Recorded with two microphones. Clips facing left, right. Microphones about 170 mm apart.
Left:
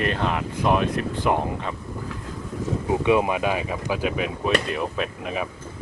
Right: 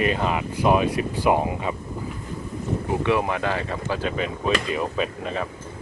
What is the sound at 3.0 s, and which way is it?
Speech, 15° left (ahead or behind).